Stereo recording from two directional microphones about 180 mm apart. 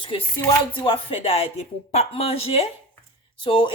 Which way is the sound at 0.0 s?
25° left (ahead or behind).